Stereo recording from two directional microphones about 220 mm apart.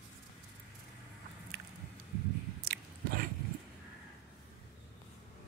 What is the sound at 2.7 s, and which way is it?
Biting, 40° right (ahead or behind).